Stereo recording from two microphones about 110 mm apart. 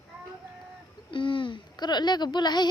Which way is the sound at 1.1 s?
50° left (ahead or behind).